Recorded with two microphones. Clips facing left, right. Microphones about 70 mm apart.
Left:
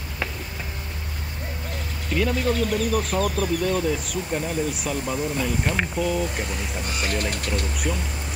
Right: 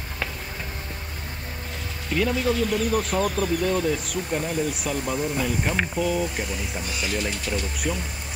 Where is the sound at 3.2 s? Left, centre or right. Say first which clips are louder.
Even; right.